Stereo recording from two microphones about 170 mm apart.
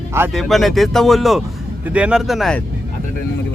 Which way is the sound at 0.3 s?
Centre (ahead or behind).